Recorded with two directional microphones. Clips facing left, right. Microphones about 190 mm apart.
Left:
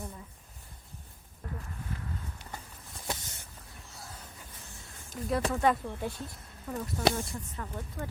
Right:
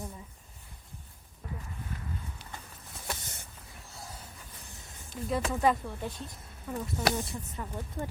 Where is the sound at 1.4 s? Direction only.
5° right (ahead or behind).